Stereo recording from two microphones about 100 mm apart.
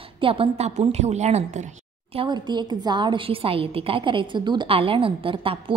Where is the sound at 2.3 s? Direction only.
45° right (ahead or behind).